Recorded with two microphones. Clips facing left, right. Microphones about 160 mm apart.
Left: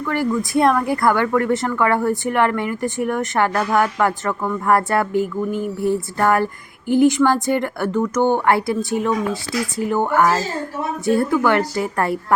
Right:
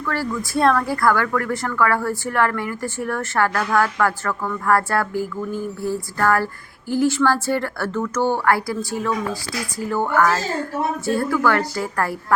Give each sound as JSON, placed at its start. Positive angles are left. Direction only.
{"t": 0.0, "sound": "speech", "side_deg": 20}